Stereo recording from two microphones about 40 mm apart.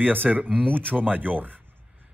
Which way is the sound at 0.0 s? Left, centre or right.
Right.